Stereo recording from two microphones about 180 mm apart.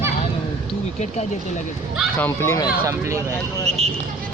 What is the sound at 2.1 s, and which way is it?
Speech, 15° left (ahead or behind).